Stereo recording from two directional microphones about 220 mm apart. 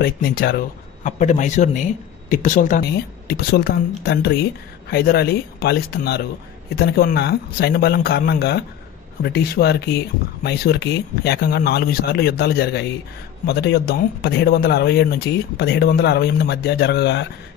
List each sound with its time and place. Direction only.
0.0 s speech: 40° left (ahead or behind)